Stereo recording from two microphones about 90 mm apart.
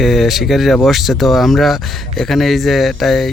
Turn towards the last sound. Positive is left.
turn(degrees=0)  # may be behind; listen again after turning